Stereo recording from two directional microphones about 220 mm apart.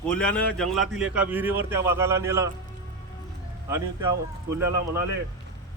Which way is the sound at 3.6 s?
15° right (ahead or behind).